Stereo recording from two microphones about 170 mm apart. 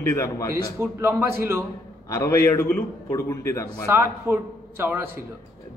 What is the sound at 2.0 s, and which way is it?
A man's voice, 15° left (ahead or behind).